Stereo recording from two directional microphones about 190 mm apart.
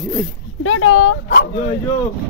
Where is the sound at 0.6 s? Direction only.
90° left.